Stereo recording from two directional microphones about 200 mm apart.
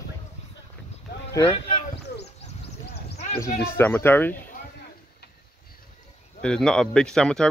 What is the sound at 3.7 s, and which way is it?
Speech, 10° left (ahead or behind).